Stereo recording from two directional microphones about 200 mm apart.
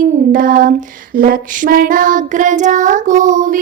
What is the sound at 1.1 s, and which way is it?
Child singing, 45° right (ahead or behind).